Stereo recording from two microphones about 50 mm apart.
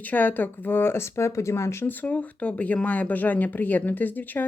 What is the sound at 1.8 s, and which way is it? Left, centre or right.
Speech, left.